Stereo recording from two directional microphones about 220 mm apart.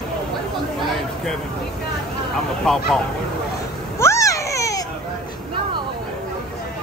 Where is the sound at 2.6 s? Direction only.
Centre (ahead or behind).